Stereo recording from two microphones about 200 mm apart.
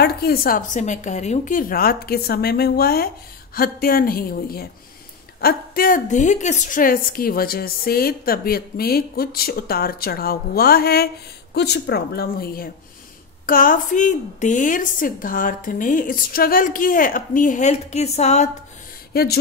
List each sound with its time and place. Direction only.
0.0 s a woman's voice: 50° left (ahead or behind); by 18.5 s 35° left (ahead or behind)
19.1 s a woman's voice: 50° left (ahead or behind)